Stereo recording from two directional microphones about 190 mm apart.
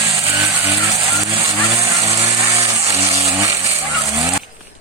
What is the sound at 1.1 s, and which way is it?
Vehicle, 15° right (ahead or behind).